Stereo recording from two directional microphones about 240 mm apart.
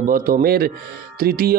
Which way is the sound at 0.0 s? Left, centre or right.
Right.